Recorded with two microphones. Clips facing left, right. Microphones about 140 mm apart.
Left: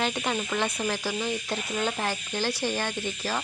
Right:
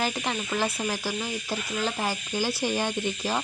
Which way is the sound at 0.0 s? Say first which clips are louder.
Left 1 dB; centre (ahead or behind).